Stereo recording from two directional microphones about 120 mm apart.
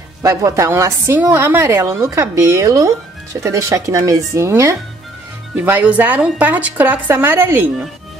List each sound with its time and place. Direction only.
0.2 s a woman's voice: 25° right (ahead or behind)